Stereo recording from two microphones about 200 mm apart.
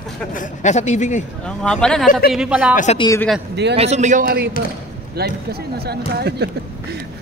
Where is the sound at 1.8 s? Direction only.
5° left (ahead or behind).